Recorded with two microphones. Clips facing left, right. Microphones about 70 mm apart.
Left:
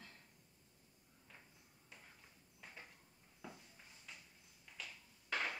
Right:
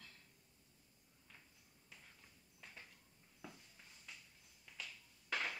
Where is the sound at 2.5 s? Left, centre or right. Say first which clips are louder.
Left 2 dB; centre.